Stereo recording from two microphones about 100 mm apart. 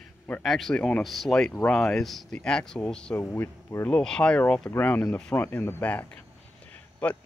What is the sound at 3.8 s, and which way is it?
Speech, 5° left (ahead or behind).